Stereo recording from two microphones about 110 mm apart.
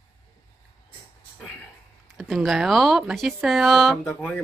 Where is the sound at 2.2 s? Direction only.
Centre (ahead or behind).